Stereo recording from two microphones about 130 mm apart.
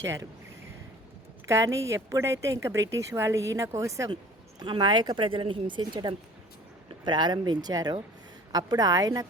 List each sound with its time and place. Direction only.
0.0 s a woman's voice: 25° right (ahead or behind)
1.5 s a woman's voice: 25° right (ahead or behind)
4.6 s a woman's voice: 35° right (ahead or behind)